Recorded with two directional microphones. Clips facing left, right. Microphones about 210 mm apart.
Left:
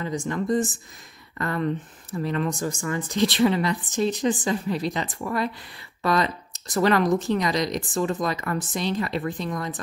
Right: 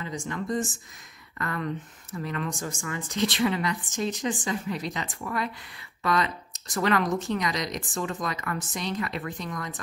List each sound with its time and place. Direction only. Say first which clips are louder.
0.0 s speech: left 6 dB; 40° left (ahead or behind)